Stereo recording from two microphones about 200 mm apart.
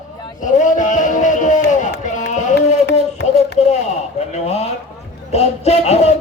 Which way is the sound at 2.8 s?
55° left (ahead or behind).